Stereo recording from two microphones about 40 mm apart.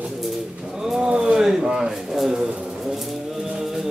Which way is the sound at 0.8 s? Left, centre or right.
Centre.